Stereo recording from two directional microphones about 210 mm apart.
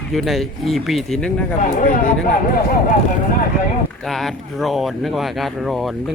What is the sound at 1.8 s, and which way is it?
Speech, 40° left (ahead or behind).